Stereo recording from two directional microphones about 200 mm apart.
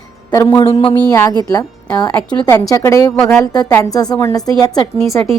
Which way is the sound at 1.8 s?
5° left (ahead or behind).